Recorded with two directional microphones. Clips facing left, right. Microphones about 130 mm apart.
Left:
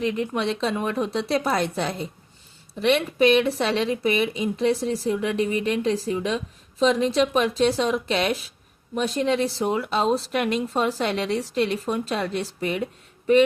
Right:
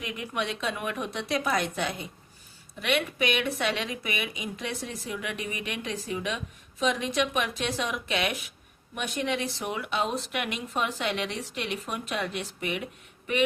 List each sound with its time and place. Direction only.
0.0 s speech: 30° left (ahead or behind)